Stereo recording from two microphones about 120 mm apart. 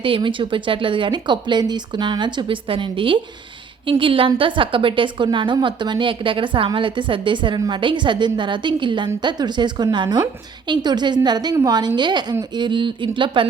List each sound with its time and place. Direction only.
0.0 s a woman's voice: 45° right (ahead or behind)